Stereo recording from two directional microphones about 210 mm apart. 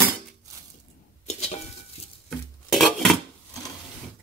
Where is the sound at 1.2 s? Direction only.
30° left (ahead or behind).